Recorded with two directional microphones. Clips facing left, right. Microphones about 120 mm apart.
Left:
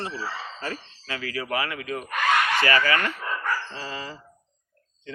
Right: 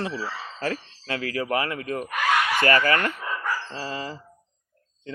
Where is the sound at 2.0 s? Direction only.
5° right (ahead or behind).